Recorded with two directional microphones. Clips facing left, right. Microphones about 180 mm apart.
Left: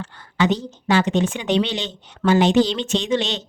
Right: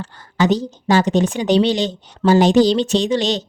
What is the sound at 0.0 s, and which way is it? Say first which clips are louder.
Speech: right 2 dB; 40° right (ahead or behind).